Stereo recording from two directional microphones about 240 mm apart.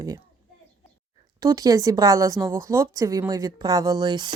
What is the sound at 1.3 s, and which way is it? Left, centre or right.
Speech, centre.